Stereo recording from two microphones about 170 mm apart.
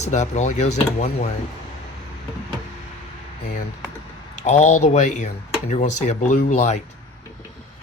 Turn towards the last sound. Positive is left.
turn(degrees=40)  # may be behind; listen again after turning